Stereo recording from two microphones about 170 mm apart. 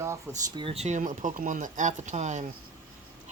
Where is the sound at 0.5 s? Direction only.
35° right (ahead or behind).